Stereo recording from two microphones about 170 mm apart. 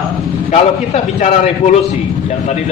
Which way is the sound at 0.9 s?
40° left (ahead or behind).